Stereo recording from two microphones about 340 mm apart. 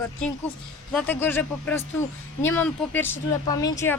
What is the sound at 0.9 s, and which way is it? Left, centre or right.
Speech, centre.